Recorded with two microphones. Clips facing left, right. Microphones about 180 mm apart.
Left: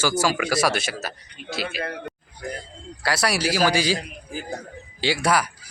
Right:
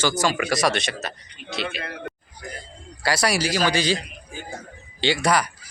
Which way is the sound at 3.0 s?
Centre (ahead or behind).